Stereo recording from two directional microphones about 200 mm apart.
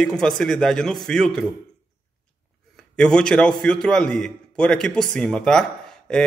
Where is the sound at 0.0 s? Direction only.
5° left (ahead or behind).